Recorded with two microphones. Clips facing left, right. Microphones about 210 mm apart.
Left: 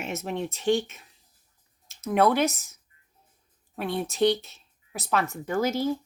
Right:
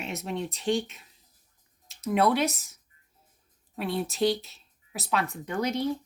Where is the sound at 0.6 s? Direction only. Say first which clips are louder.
Left 4 dB; centre (ahead or behind).